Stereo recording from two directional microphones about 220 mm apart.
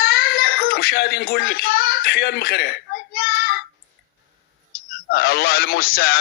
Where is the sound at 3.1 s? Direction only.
40° left (ahead or behind).